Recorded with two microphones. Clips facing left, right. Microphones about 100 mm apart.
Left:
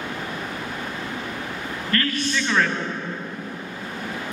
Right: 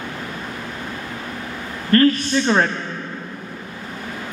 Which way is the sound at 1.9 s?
35° right (ahead or behind).